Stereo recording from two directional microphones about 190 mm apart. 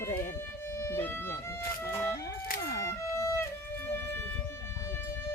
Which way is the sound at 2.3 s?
50° left (ahead or behind).